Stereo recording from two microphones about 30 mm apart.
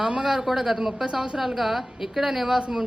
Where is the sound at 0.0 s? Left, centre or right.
Centre.